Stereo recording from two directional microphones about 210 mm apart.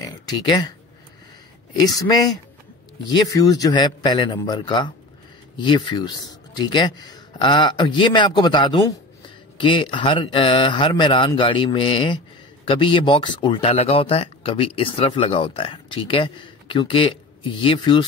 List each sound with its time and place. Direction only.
0.0 s speech: 20° left (ahead or behind)
1.8 s speech: 20° left (ahead or behind)